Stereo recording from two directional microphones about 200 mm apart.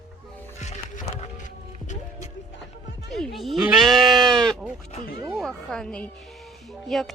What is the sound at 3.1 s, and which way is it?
Sheep, centre (ahead or behind).